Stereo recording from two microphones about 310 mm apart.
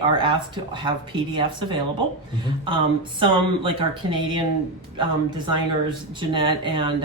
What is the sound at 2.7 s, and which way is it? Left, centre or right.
Speech, centre.